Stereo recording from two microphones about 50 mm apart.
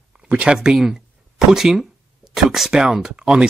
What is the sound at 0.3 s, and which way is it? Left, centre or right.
Speech, right.